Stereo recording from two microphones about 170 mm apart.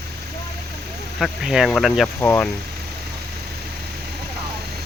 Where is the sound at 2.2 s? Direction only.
10° left (ahead or behind).